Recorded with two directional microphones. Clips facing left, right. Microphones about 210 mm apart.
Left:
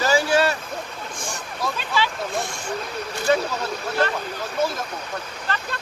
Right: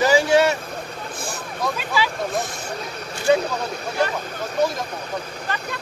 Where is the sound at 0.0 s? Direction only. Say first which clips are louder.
Right 3 dB; 20° right (ahead or behind).